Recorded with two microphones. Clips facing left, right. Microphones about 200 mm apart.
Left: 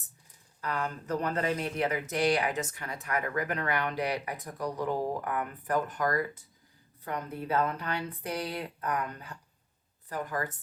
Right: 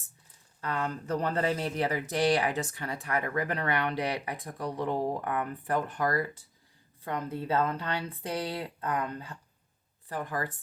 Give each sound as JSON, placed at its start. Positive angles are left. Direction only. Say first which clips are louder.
{"t": 0.6, "sound": "speech", "louder": "right 1 dB", "side_deg": -30}